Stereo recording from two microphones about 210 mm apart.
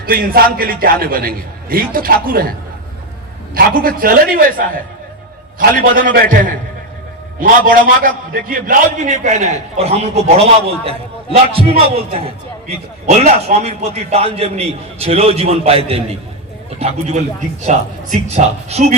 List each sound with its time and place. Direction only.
0.0 s a man's voice: 45° right (ahead or behind)
3.5 s a man's voice: 45° right (ahead or behind)